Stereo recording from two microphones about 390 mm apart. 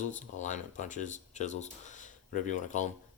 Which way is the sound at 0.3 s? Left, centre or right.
Centre.